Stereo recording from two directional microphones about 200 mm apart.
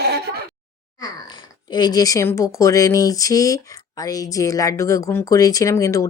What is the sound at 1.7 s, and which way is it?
Speech, 20° left (ahead or behind).